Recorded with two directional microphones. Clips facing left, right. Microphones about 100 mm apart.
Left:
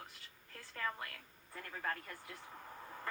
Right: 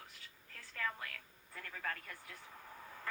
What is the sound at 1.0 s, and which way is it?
A woman's voice, 25° left (ahead or behind).